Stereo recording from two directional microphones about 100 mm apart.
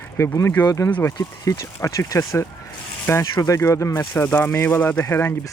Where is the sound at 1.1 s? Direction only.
35° left (ahead or behind).